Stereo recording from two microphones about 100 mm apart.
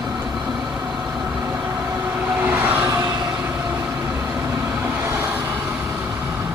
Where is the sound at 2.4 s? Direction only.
15° right (ahead or behind).